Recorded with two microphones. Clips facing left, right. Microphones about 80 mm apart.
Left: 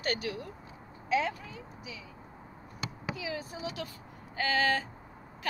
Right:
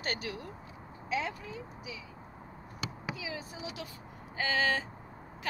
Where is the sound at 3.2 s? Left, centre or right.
Centre.